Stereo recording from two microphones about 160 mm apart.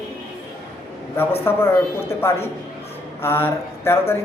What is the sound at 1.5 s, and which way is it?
A man's voice, 15° left (ahead or behind).